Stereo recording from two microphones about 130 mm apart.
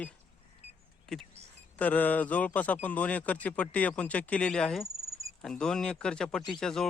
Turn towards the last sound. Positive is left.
turn(degrees=5)  # may be behind; listen again after turning